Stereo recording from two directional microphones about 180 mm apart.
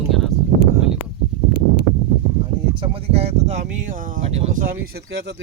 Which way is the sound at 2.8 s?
30° right (ahead or behind).